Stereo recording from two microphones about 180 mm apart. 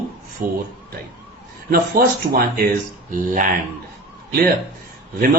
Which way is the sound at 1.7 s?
55° right (ahead or behind).